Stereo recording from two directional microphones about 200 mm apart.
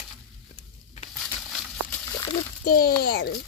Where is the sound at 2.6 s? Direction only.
50° left (ahead or behind).